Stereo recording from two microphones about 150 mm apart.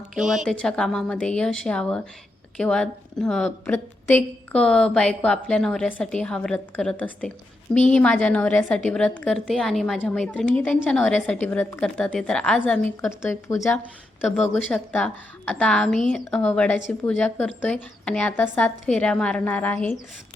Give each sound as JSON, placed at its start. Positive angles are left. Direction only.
{"t": 0.1, "sound": "a woman's voice", "side_deg": 0}